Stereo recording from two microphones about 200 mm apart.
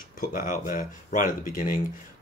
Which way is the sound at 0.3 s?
45° left (ahead or behind).